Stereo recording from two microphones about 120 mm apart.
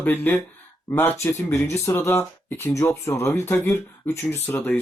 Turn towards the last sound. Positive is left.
turn(degrees=20)  # may be behind; listen again after turning